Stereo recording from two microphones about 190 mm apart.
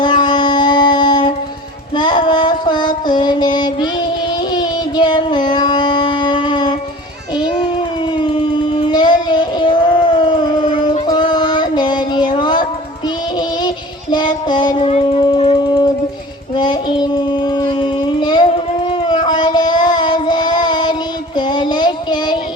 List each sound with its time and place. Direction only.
0.0 s music: 25° left (ahead or behind)
2.0 s child singing: 25° left (ahead or behind)
7.3 s a sound: 25° left (ahead or behind)
8.2 s child singing: 25° left (ahead or behind)
11.0 s music: 20° left (ahead or behind)
13.6 s child singing: 20° left (ahead or behind)